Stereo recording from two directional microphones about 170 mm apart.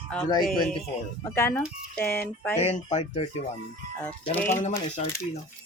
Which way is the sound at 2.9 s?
40° left (ahead or behind).